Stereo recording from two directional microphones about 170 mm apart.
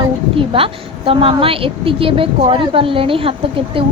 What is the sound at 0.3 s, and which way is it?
A woman's voice, 30° right (ahead or behind).